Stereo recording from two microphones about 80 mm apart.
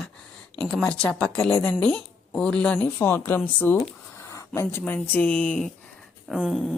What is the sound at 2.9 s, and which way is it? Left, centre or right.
Speech, left.